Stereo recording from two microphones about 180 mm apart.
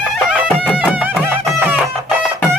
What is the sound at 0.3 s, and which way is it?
Music, 5° right (ahead or behind).